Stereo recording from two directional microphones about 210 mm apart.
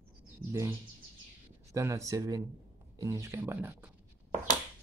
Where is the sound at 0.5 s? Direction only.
15° right (ahead or behind).